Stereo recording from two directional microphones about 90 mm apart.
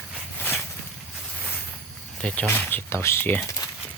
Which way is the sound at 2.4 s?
25° left (ahead or behind).